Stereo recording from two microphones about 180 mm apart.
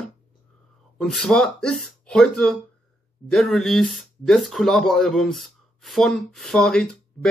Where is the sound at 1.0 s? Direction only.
5° left (ahead or behind).